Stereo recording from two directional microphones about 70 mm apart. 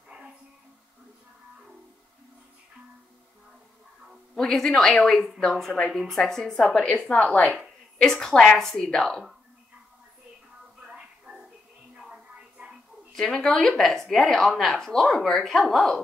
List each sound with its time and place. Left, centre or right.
4.4 s a woman's voice: centre
10.8 s music: centre
13.1 s speech: centre